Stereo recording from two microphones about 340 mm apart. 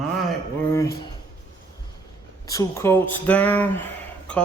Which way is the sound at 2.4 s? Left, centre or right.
Centre.